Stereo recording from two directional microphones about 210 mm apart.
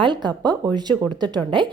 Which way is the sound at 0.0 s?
20° right (ahead or behind).